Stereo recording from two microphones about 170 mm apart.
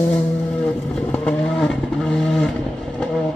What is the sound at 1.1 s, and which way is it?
Vehicle, 5° left (ahead or behind).